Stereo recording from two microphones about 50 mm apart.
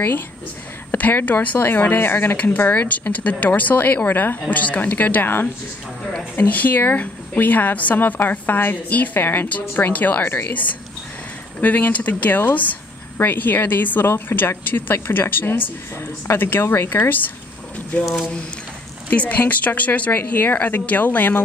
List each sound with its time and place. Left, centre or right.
0.9 s speech: left
2.7 s speech: left
9.2 s speech: left
9.5 s speech: left
11.6 s speech: left
16.6 s speech: left
18.0 s speech: centre
19.0 s speech: left